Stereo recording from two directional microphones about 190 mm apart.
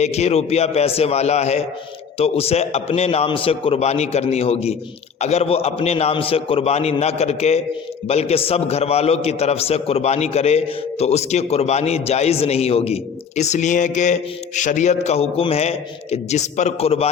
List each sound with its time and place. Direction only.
0.0 s a man's voice: 35° left (ahead or behind)